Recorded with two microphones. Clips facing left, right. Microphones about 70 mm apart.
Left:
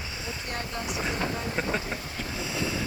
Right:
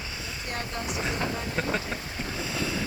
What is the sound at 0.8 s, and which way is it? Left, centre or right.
Speech, centre.